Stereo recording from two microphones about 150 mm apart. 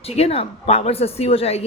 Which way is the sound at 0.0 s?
45° left (ahead or behind).